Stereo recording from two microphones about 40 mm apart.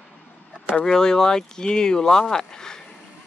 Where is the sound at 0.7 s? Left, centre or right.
Centre.